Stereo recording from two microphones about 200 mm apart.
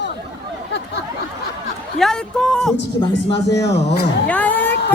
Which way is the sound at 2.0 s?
5° left (ahead or behind).